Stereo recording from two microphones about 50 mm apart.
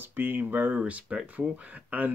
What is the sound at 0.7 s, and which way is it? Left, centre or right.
Speech, right.